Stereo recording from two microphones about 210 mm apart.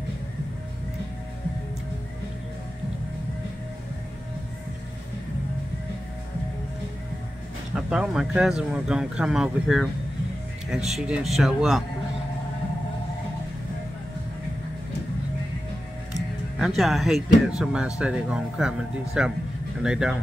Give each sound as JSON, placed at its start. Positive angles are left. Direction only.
{"t": 7.7, "sound": "speech", "side_deg": -5}
{"t": 16.5, "sound": "speech", "side_deg": 0}